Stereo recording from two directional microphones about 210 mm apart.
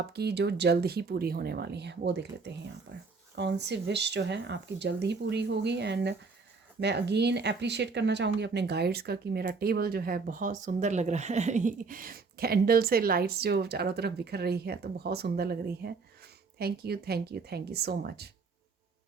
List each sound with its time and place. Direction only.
0.1 s speech: 50° right (ahead or behind)